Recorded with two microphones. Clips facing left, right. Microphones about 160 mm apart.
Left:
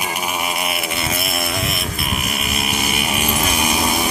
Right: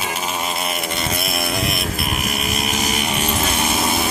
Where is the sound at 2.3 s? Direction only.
Centre (ahead or behind).